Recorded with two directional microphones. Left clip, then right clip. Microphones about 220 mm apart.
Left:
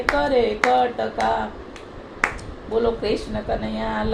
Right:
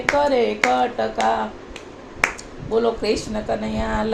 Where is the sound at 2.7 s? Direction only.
30° right (ahead or behind).